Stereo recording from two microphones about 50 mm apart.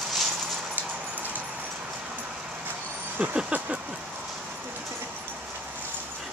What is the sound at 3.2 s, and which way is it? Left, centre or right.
Vehicle, right.